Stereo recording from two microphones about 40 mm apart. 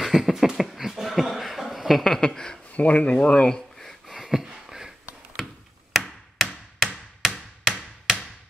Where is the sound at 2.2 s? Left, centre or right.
Centre.